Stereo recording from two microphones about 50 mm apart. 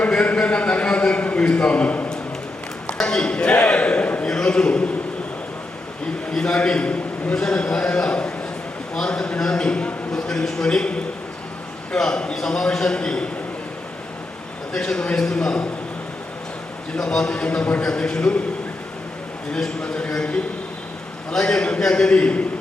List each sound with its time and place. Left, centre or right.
0.1 s a sound: left
1.7 s a man's voice: left
3.0 s a sound: centre
4.3 s a sound: centre
6.3 s a man's voice: centre
10.1 s a man's voice: centre
14.7 s a man's voice: centre
17.0 s a man's voice: centre
19.5 s a man's voice: centre